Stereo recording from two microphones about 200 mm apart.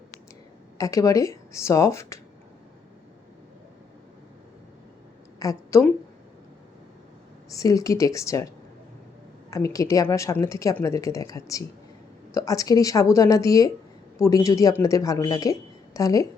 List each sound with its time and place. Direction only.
0.8 s speech: 15° left (ahead or behind)
5.4 s a woman's voice: 15° left (ahead or behind)
7.5 s speech: 15° left (ahead or behind)
9.5 s speech: 15° left (ahead or behind)